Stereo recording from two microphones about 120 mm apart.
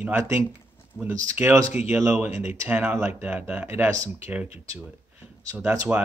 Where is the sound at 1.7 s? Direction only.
10° right (ahead or behind).